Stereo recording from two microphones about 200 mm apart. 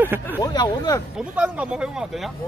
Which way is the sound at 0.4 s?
20° left (ahead or behind).